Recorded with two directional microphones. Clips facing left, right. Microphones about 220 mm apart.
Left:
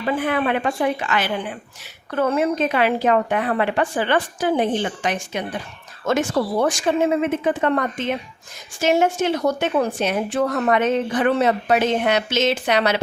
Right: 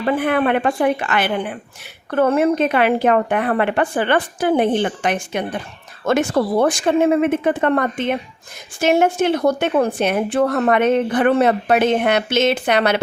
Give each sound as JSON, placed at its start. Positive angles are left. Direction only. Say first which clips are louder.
{"t": 0.0, "sound": "a woman's voice", "louder": "right 4 dB", "side_deg": -55}